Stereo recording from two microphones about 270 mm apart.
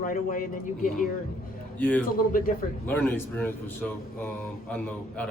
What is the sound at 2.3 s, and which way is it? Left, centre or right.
Speech, left.